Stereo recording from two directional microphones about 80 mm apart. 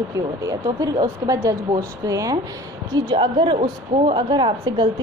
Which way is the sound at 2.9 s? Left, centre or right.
Right.